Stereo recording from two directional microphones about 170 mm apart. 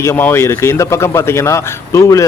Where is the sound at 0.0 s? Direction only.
15° left (ahead or behind).